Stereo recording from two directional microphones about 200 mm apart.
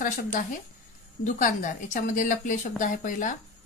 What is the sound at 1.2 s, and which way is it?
Speech, 40° left (ahead or behind).